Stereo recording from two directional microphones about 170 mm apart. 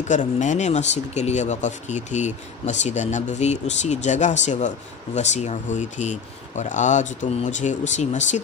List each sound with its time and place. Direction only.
0.1 s speech: 45° left (ahead or behind)